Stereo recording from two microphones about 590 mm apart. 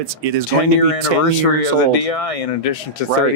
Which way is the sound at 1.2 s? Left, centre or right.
Left.